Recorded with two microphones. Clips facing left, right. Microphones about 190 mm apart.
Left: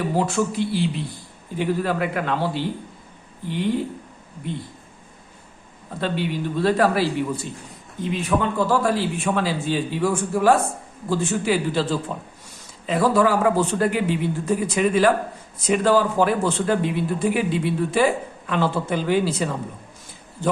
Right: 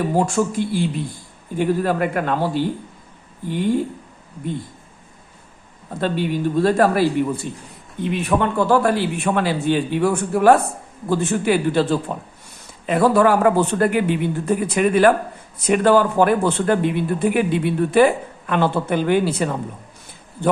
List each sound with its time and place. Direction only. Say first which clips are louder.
0.2 s a man's voice: right 2 dB; 45° right (ahead or behind)
6.0 s a man's voice: right 4 dB; 45° right (ahead or behind)
7.9 s a man's voice: right 3 dB; 60° right (ahead or behind)